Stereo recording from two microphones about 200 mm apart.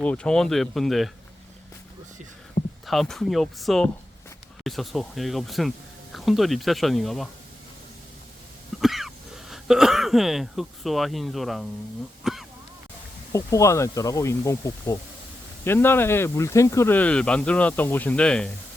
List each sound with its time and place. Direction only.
0.0 s speech: 5° left (ahead or behind)
2.8 s speech: centre (ahead or behind)
8.8 s speech: centre (ahead or behind)
12.2 s throat clearing: centre (ahead or behind)
13.3 s speech: 15° left (ahead or behind)